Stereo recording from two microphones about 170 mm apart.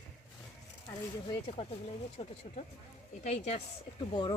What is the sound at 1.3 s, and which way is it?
Speech, 35° left (ahead or behind).